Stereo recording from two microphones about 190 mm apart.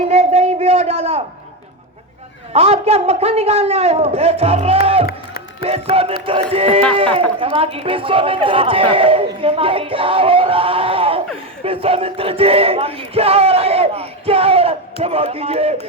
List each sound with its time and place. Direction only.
0.1 s a sound: 35° right (ahead or behind)
2.5 s battle cry: 35° right (ahead or behind)
5.0 s music: 55° left (ahead or behind)
5.6 s battle cry: 30° right (ahead or behind)
6.9 s speech: 30° right (ahead or behind)
11.6 s battle cry: 30° right (ahead or behind)